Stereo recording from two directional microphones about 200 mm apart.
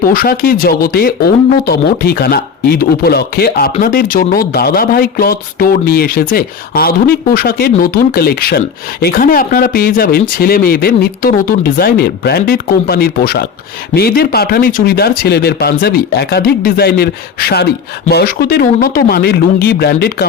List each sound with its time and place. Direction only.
0.0 s speech: 45° left (ahead or behind)